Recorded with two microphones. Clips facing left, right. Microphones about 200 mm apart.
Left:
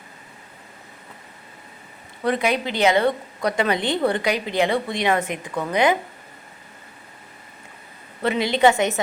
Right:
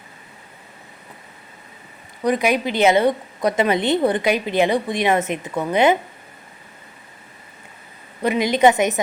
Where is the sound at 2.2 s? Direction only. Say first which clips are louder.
Right 3 dB; 20° right (ahead or behind).